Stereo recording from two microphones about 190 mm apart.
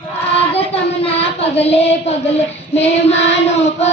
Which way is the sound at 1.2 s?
30° left (ahead or behind).